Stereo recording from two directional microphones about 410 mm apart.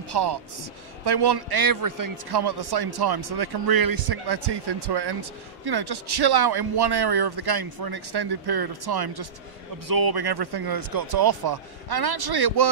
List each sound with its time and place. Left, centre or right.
0.1 s a man's voice: right